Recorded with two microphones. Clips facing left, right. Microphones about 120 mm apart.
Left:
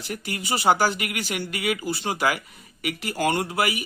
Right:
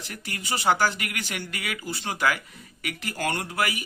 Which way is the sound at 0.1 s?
15° left (ahead or behind).